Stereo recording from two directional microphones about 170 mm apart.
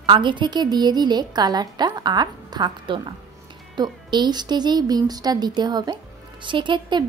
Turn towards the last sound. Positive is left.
turn(degrees=-25)  # may be behind; listen again after turning